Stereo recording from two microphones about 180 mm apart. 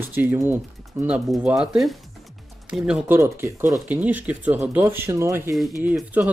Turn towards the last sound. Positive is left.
turn(degrees=-10)  # may be behind; listen again after turning